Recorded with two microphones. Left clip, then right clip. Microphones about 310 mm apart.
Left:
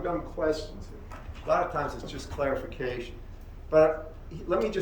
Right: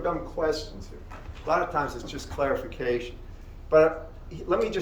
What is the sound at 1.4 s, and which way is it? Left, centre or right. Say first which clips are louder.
Speech: right 1 dB; centre.